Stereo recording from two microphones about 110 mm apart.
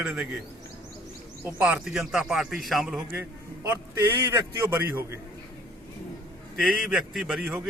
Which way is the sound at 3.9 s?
25° right (ahead or behind).